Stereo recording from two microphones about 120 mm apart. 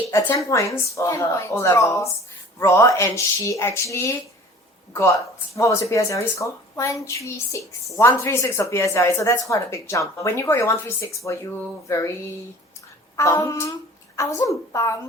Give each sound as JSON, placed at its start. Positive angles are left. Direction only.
{"t": 0.1, "sound": "a woman's voice", "side_deg": 25}
{"t": 5.5, "sound": "a woman's voice", "side_deg": 25}
{"t": 13.1, "sound": "a woman's voice", "side_deg": 25}